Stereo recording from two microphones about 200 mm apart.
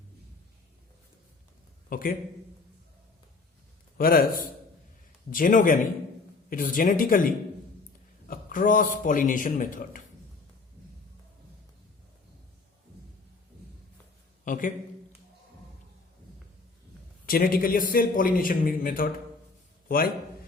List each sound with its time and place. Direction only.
1.9 s speech: 45° left (ahead or behind)
3.9 s a man's voice: 45° left (ahead or behind)
14.4 s a man's voice: 40° left (ahead or behind)
17.2 s a man's voice: 45° left (ahead or behind)